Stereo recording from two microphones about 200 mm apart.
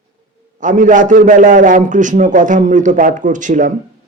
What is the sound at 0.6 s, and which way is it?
A man's voice, 40° right (ahead or behind).